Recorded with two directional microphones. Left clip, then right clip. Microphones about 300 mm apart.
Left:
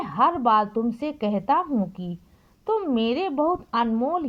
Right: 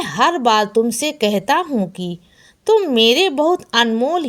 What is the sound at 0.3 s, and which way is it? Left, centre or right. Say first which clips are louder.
Speech: right 6 dB; centre.